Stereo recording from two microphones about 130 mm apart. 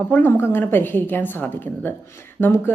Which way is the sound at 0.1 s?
15° left (ahead or behind).